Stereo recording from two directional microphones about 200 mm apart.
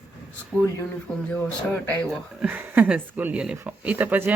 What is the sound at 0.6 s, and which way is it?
Speech, 10° left (ahead or behind).